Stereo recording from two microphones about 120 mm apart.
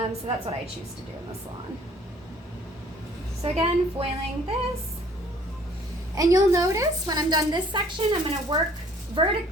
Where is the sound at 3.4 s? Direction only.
55° right (ahead or behind).